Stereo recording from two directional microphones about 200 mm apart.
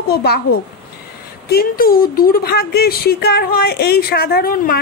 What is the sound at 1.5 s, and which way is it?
Speech, 50° left (ahead or behind).